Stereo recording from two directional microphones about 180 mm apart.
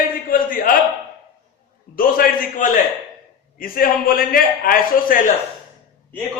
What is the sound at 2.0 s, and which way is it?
A man's voice, 55° left (ahead or behind).